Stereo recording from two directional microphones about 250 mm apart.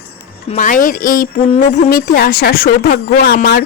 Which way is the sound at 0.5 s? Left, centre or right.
Left.